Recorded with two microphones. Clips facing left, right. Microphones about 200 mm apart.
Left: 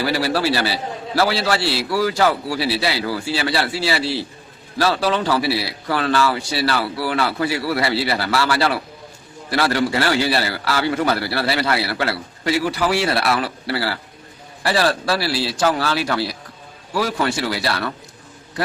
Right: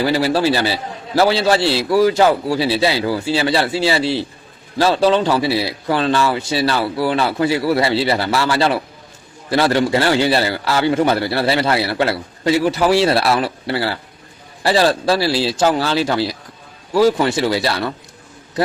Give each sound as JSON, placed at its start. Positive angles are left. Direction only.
{"t": 0.0, "sound": "a man's voice", "side_deg": -20}